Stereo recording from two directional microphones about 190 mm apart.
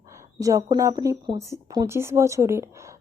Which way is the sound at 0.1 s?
15° right (ahead or behind).